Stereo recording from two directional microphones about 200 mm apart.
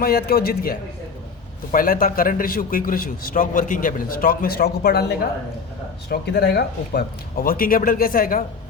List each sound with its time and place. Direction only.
0.0 s a man's voice: 50° left (ahead or behind)